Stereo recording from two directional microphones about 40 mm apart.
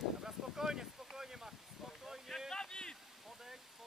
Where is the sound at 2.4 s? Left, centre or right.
Centre.